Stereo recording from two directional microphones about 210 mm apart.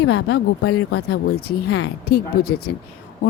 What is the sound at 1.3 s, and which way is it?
Speech, 50° left (ahead or behind).